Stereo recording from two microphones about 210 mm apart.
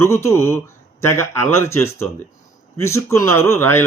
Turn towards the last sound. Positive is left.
turn(degrees=10)  # may be behind; listen again after turning